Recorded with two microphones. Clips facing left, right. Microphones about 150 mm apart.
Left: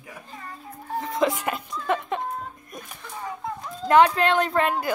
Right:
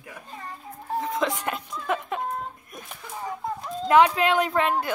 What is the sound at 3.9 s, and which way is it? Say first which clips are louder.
Speech: left 1 dB; 5° right (ahead or behind).